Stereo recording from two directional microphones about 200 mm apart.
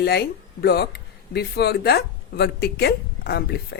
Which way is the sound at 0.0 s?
55° left (ahead or behind).